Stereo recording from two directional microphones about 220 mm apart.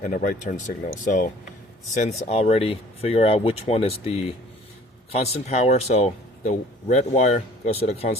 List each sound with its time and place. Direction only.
0.0 s speech: 40° left (ahead or behind)